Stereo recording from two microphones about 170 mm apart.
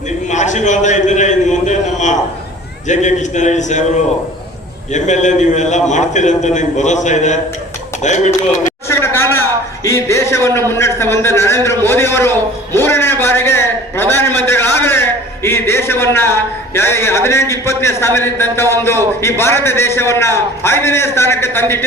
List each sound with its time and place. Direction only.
0.3 s a sound: 45° left (ahead or behind)
2.8 s a man's voice: 45° left (ahead or behind)
4.9 s a man's voice: 45° left (ahead or behind)
8.9 s a man's voice: 15° left (ahead or behind)